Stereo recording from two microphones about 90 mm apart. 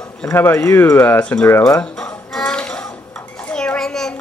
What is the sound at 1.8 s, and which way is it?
Music, 10° left (ahead or behind).